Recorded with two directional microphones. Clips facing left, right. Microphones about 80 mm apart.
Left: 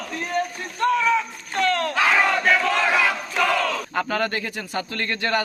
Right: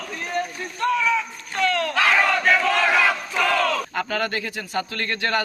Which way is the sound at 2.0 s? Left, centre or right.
Centre.